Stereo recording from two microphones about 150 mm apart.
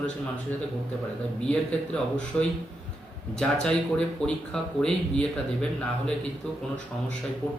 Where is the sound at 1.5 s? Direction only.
5° left (ahead or behind).